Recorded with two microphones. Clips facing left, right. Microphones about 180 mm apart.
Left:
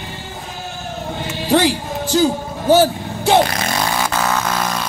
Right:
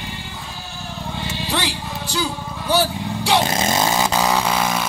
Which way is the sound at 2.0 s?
45° left (ahead or behind).